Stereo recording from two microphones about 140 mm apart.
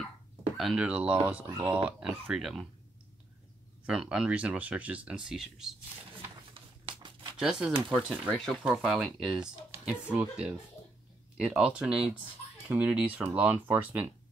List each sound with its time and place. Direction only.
0.6 s speech: 5° right (ahead or behind)
3.8 s speech: 5° right (ahead or behind)
6.5 s a sound: 35° right (ahead or behind)
7.3 s speech: 5° right (ahead or behind)